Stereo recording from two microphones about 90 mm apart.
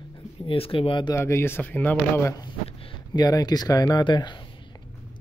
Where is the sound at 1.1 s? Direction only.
30° left (ahead or behind).